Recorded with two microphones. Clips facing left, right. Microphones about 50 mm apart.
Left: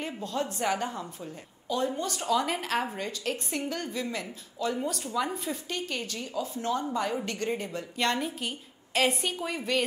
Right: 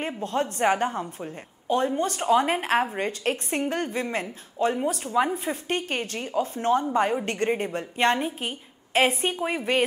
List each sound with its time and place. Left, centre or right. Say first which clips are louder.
0.0 s a woman's voice: right 5 dB; right